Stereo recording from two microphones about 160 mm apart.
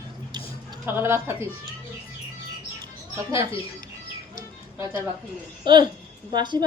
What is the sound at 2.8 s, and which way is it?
Bird, 20° right (ahead or behind).